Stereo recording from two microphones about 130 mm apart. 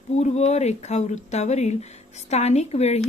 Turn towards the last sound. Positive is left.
turn(degrees=55)  # may be behind; listen again after turning